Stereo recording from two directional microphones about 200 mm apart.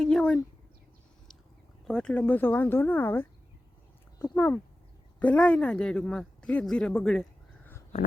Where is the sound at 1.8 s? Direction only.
5° left (ahead or behind).